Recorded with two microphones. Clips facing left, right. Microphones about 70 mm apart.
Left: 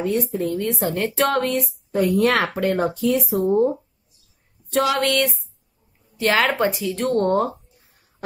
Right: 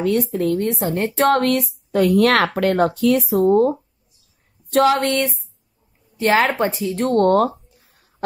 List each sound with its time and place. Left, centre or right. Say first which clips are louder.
0.3 s speech: right 4 dB; right
0.6 s speech: right 2 dB; right
1.3 s speech: right 4 dB; right
1.9 s speech: right 3 dB; right
4.8 s a woman's voice: right 2 dB; right
7.2 s speech: right 5 dB; right